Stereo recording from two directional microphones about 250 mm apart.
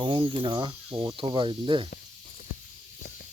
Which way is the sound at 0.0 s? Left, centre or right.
Centre.